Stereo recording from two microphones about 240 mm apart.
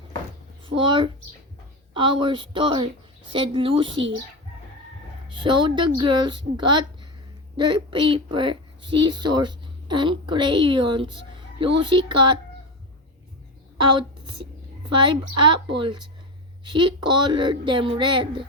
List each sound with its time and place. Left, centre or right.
0.6 s a woman's voice: right
5.3 s a woman's voice: centre
14.8 s a woman's voice: centre